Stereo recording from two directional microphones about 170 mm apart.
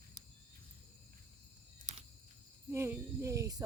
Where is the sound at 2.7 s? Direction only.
15° right (ahead or behind).